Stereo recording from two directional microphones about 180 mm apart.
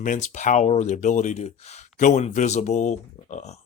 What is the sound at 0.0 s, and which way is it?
Speech, 45° left (ahead or behind).